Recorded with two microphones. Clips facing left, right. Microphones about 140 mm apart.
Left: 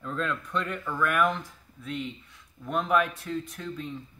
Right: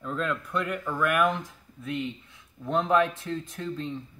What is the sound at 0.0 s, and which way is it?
A man's voice, 5° right (ahead or behind).